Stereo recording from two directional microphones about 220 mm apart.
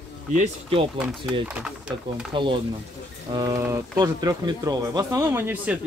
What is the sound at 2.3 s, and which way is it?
Speech, 20° right (ahead or behind).